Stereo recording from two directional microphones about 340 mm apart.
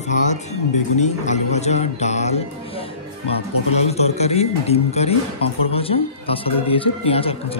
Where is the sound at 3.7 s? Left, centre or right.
Centre.